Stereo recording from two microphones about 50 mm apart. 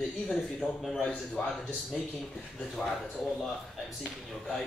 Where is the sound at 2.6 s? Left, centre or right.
Centre.